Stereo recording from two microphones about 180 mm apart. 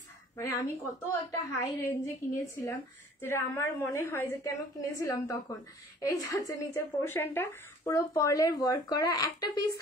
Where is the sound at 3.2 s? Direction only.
15° left (ahead or behind).